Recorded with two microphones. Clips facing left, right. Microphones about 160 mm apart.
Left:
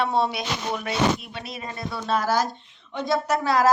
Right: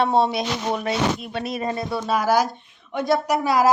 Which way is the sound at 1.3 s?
50° right (ahead or behind).